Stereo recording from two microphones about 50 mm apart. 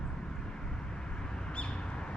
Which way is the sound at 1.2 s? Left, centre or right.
Centre.